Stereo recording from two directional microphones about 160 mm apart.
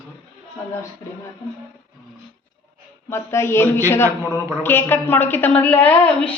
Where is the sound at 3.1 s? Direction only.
15° left (ahead or behind).